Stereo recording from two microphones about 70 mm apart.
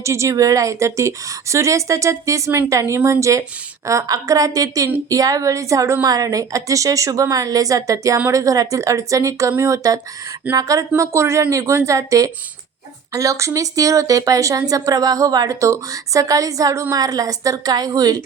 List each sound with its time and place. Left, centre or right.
0.0 s a woman's voice: right
6.1 s a woman's voice: right
15.6 s a woman's voice: right